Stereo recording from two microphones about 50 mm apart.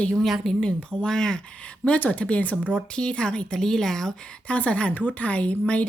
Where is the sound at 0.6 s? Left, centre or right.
Centre.